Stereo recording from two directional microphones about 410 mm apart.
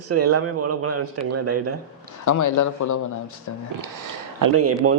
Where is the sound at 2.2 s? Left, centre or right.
Left.